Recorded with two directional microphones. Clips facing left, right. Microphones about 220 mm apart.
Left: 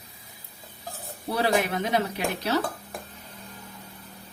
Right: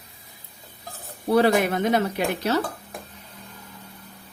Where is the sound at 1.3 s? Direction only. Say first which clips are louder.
Right 6 dB; 55° right (ahead or behind).